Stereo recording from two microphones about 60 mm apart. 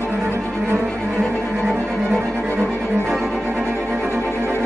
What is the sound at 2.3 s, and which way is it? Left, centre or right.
Cello, right.